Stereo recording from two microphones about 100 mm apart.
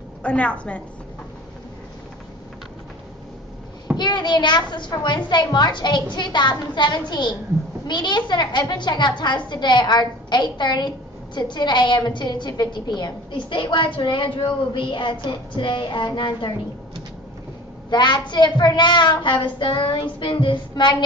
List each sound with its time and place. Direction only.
0.2 s a woman's voice: 10° left (ahead or behind)
3.9 s a woman's voice: 50° left (ahead or behind)
17.8 s a woman's voice: 50° left (ahead or behind)